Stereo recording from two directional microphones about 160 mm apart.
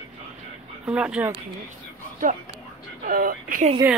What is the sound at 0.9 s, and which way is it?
Speech, 5° right (ahead or behind).